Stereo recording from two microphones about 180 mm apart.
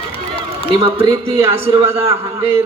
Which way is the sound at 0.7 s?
30° right (ahead or behind).